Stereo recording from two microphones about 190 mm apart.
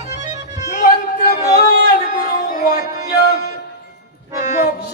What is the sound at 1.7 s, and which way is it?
Music, 50° left (ahead or behind).